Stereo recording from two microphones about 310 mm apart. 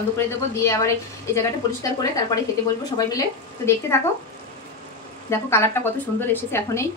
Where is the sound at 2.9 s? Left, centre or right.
Centre.